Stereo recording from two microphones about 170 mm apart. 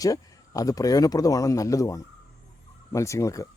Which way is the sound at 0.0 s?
20° left (ahead or behind).